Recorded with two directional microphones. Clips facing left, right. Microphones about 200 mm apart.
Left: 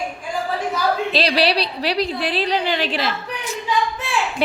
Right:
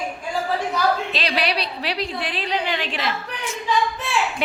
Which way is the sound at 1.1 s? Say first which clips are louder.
Left 5 dB; 35° left (ahead or behind).